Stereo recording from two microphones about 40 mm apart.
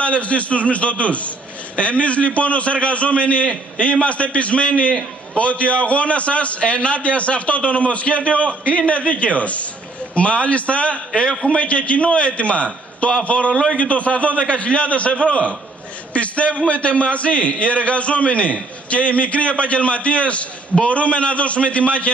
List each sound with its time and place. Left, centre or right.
0.0 s a man's voice: left